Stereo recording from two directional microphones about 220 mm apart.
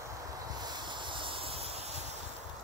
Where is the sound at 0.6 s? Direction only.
20° right (ahead or behind).